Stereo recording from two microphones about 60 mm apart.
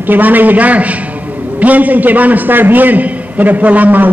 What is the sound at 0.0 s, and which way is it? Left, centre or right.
A man's voice, right.